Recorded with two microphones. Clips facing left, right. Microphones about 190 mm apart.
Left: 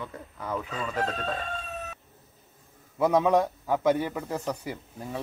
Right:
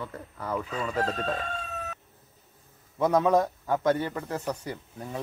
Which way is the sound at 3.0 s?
5° left (ahead or behind).